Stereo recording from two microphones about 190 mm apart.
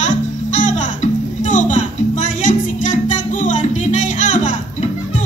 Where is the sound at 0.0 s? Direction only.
40° left (ahead or behind).